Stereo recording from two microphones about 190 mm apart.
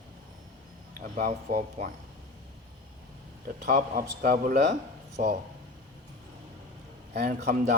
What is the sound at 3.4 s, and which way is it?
Speech, 45° right (ahead or behind).